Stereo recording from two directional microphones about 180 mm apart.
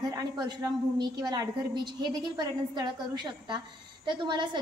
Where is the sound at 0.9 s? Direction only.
25° right (ahead or behind).